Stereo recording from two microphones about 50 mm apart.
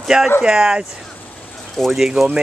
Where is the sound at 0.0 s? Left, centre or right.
Centre.